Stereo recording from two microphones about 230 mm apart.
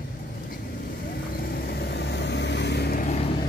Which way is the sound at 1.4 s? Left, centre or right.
Left.